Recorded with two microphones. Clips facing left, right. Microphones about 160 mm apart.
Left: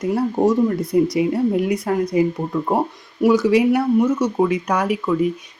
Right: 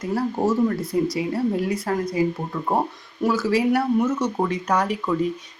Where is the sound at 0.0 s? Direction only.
20° left (ahead or behind).